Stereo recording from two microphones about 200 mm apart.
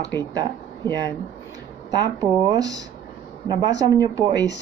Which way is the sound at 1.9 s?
20° right (ahead or behind).